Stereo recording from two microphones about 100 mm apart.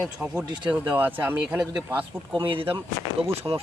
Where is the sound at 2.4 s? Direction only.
60° right (ahead or behind).